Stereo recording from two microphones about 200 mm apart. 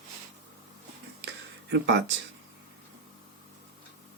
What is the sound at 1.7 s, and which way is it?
Speech, 60° right (ahead or behind).